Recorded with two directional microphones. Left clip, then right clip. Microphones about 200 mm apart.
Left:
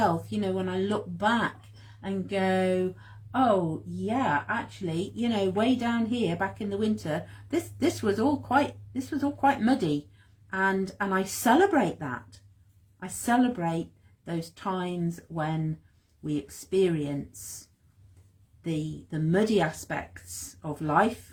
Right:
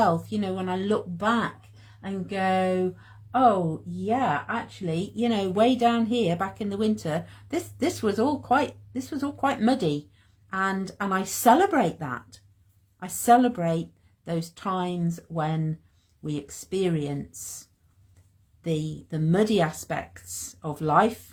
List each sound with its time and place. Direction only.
0.0 s speech: 35° right (ahead or behind)
4.1 s speech: 35° right (ahead or behind)
19.3 s speech: 40° right (ahead or behind)